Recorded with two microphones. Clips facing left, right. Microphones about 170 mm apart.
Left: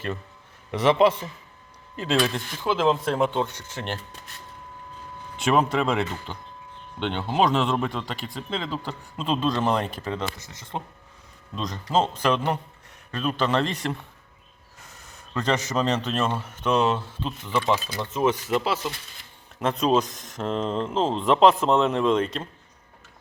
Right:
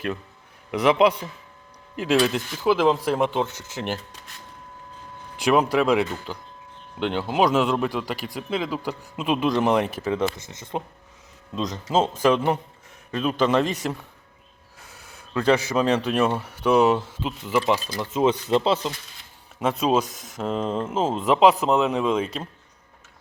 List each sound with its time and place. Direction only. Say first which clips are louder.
0.7 s speech: right 1 dB; centre (ahead or behind)
5.8 s speech: right 4 dB; 5° right (ahead or behind)
10.4 s speech: right 4 dB; 25° right (ahead or behind)
11.9 s speech: right 3 dB; 15° right (ahead or behind)
15.3 s speech: right 5 dB; 10° right (ahead or behind); by 18.9 s 25° right (ahead or behind)
19.5 s speech: even; 5° right (ahead or behind)